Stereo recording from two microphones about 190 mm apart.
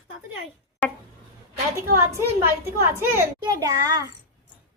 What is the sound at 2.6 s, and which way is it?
A child's voice, 15° right (ahead or behind).